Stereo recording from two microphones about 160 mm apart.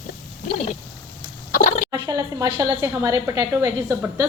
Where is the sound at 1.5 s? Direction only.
55° left (ahead or behind).